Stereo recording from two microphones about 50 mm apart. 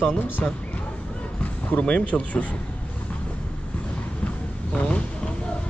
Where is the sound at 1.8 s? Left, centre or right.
Centre.